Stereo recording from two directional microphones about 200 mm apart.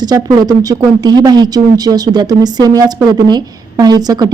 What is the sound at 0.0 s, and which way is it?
Speech, 20° right (ahead or behind).